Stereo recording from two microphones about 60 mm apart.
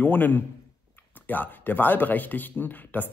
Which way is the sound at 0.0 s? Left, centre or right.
Left.